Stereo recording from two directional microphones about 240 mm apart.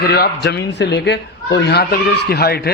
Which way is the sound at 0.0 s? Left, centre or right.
Left.